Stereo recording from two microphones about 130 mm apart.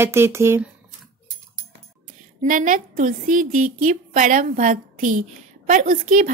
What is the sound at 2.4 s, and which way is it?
A woman's voice, 90° right.